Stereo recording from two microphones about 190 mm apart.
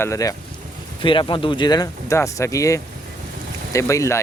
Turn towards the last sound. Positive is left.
turn(degrees=15)  # may be behind; listen again after turning